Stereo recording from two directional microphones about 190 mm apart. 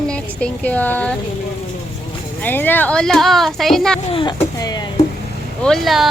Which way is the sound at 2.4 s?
10° left (ahead or behind).